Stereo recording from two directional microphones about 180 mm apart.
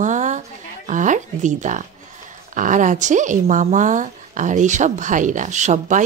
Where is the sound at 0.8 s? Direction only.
45° right (ahead or behind).